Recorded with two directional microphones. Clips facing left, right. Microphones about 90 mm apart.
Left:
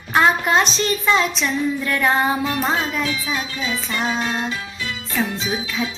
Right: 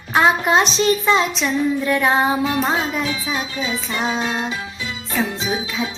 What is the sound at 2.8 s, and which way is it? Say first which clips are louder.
Music: right 1 dB; 30° right (ahead or behind).